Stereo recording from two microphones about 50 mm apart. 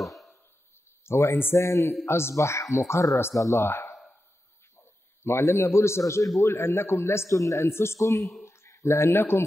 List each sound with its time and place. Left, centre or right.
0.0 s a sound: centre
1.0 s speech: left
1.6 s speech: left
2.0 s a man's voice: left
3.3 s speech: left
3.9 s a sound: centre
4.7 s a man's voice: left
7.7 s a man's voice: left
8.2 s speech: centre
8.5 s speech: left